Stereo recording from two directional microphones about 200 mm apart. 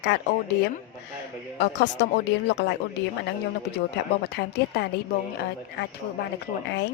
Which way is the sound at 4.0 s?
60° left (ahead or behind).